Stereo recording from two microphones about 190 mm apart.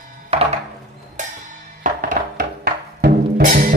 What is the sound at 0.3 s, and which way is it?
Music, 30° right (ahead or behind).